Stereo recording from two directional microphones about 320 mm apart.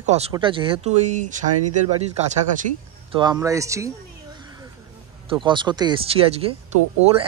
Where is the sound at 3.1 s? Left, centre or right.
Centre.